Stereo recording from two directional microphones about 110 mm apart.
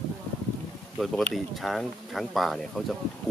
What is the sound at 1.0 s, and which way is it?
Speech, centre (ahead or behind).